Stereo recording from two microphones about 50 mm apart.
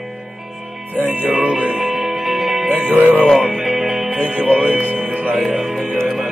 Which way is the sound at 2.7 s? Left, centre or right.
Right.